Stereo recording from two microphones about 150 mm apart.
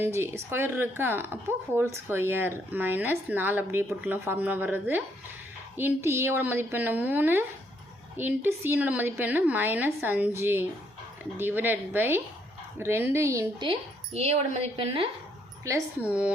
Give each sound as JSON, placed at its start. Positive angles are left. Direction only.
{"t": 0.1, "sound": "speech", "side_deg": -15}
{"t": 13.6, "sound": "speech", "side_deg": -40}
{"t": 16.0, "sound": "speech", "side_deg": -10}